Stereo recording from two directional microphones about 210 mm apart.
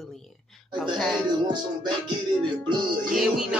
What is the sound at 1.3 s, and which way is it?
Music, 20° right (ahead or behind).